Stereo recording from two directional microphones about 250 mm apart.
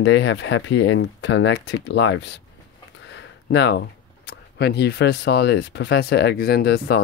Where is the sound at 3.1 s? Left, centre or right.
Left.